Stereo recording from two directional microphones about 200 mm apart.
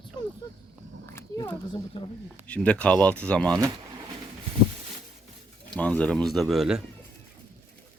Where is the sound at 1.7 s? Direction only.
25° left (ahead or behind).